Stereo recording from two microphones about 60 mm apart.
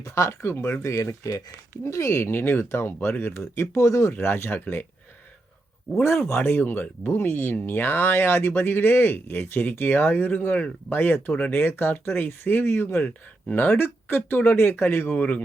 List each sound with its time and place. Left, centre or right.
0.0 s speech: left
2.3 s speech: left
3.8 s speech: left
4.1 s speech: left
6.0 s speech: left
13.5 s speech: left
15.1 s a man's voice: left